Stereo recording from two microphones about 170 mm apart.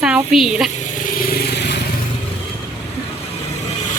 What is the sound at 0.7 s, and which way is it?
Vehicle, 55° left (ahead or behind).